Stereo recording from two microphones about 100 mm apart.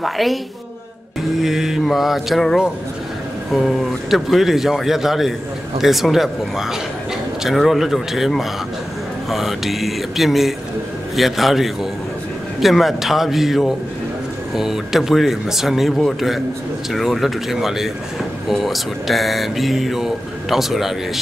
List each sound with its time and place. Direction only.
0.0 s speech: centre (ahead or behind)
1.4 s speech: 5° right (ahead or behind)